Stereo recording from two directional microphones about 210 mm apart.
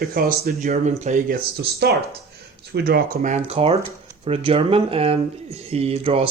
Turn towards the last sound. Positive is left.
turn(degrees=-30)  # may be behind; listen again after turning